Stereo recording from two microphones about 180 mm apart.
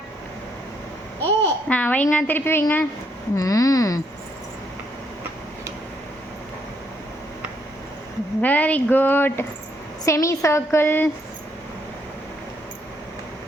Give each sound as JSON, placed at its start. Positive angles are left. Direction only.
{"t": 1.2, "sound": "a child's voice", "side_deg": 10}
{"t": 8.4, "sound": "speech", "side_deg": 10}